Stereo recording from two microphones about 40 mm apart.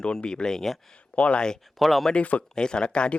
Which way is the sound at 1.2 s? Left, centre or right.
Left.